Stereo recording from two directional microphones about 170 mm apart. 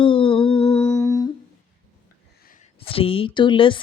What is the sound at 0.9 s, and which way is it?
Humming, 15° left (ahead or behind).